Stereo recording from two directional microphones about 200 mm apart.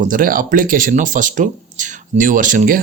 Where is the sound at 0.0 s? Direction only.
45° right (ahead or behind).